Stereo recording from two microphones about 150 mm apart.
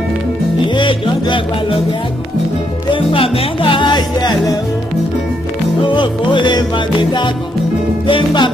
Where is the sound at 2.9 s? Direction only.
35° left (ahead or behind).